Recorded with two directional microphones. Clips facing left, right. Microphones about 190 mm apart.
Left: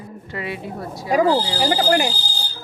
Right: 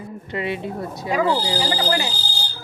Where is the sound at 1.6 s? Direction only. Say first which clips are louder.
Left 5 dB; 50° left (ahead or behind).